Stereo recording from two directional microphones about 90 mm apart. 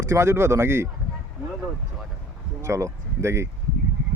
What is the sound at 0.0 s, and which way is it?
Speech, 35° right (ahead or behind).